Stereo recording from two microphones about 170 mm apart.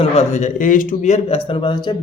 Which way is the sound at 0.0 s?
40° left (ahead or behind).